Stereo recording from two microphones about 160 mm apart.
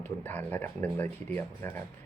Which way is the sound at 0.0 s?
10° left (ahead or behind).